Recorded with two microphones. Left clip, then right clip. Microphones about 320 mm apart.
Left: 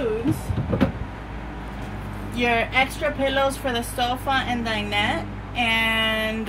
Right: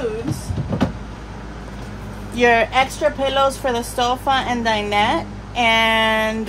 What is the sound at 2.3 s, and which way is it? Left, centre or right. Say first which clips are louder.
Speech: right 7 dB; centre.